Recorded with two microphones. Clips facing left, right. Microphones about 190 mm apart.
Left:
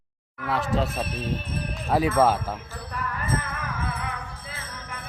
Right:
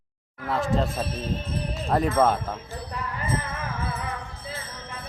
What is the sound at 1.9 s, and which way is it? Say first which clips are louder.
Speech: left 1 dB; 5° left (ahead or behind).